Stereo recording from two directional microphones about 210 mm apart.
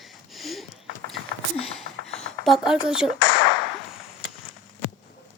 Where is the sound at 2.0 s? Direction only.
5° left (ahead or behind).